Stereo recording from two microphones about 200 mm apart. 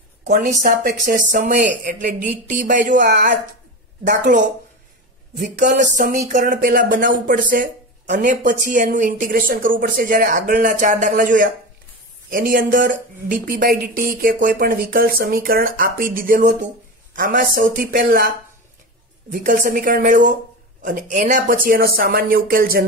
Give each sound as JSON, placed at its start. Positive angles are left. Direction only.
{"t": 0.2, "sound": "speech", "side_deg": -35}
{"t": 5.4, "sound": "speech", "side_deg": -40}
{"t": 19.3, "sound": "speech", "side_deg": -40}